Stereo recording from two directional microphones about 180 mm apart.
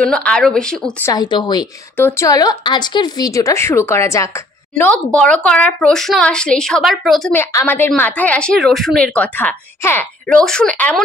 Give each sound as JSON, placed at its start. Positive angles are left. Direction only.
{"t": 0.0, "sound": "a woman's voice", "side_deg": 5}
{"t": 1.0, "sound": "a woman's voice", "side_deg": 20}
{"t": 7.3, "sound": "a woman's voice", "side_deg": 10}